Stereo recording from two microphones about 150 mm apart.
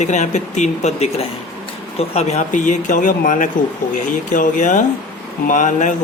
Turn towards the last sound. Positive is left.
turn(degrees=55)  # may be behind; listen again after turning